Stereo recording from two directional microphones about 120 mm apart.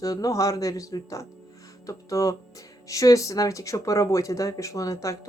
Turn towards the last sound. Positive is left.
turn(degrees=25)  # may be behind; listen again after turning